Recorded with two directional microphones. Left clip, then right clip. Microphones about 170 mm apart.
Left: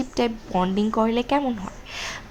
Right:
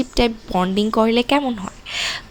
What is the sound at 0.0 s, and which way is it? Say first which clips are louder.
A woman's voice: right 5 dB; 15° right (ahead or behind).